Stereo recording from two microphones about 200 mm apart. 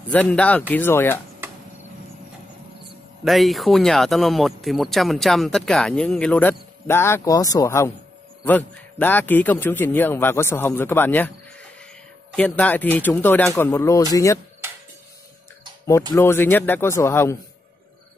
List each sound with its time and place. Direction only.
0.0 s a man's voice: 5° left (ahead or behind)
3.3 s a man's voice: centre (ahead or behind)
12.4 s a man's voice: 5° left (ahead or behind)
16.1 s a man's voice: 10° left (ahead or behind)